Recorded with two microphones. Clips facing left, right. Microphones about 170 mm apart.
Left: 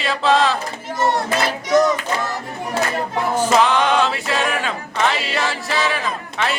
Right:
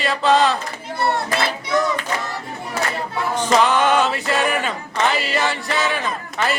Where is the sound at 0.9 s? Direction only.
40° left (ahead or behind).